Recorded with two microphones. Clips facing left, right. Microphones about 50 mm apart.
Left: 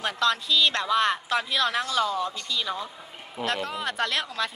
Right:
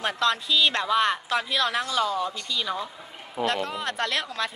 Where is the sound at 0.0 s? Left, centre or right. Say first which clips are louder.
Even; centre.